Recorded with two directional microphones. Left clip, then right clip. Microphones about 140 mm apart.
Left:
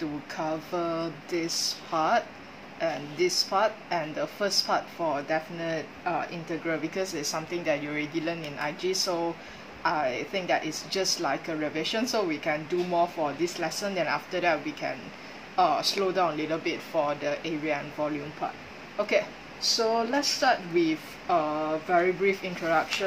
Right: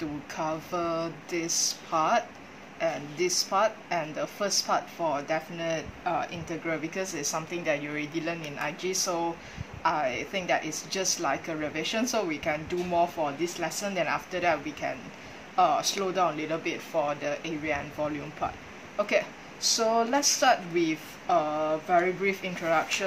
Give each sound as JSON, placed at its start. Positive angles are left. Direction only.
{"t": 0.3, "sound": "a woman's voice", "side_deg": -35}
{"t": 18.4, "sound": "a woman's voice", "side_deg": -40}
{"t": 19.6, "sound": "a woman's voice", "side_deg": -45}